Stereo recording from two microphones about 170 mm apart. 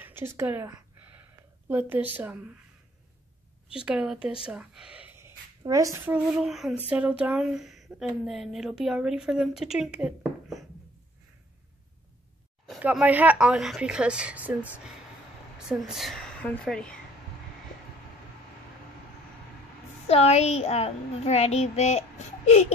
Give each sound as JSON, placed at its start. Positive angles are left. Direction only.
{"t": 0.0, "sound": "a sound", "side_deg": -15}
{"t": 1.7, "sound": "speech", "side_deg": -10}
{"t": 3.8, "sound": "a woman's voice", "side_deg": -5}
{"t": 6.1, "sound": "a woman's voice", "side_deg": -5}
{"t": 12.6, "sound": "speech", "side_deg": -5}
{"t": 15.7, "sound": "a woman's voice", "side_deg": 0}
{"t": 20.1, "sound": "a child's voice", "side_deg": 40}